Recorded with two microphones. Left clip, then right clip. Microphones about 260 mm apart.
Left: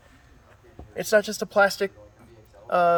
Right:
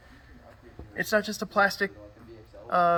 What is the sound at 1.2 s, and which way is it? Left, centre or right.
Speech, left.